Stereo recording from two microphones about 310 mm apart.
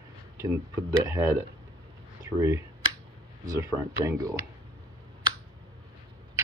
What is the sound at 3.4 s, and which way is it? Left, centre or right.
Speech, centre.